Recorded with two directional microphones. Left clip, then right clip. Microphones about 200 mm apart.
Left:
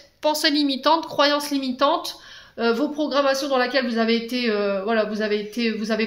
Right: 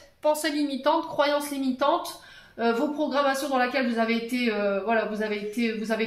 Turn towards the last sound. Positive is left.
turn(degrees=50)  # may be behind; listen again after turning